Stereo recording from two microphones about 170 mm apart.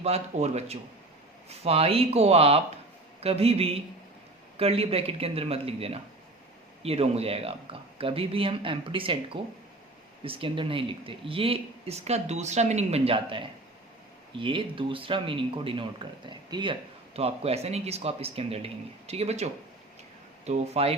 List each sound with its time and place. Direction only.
0.0 s speech: 40° right (ahead or behind)